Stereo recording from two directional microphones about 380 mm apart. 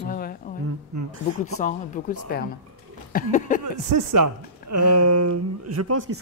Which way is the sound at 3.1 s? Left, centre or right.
Left.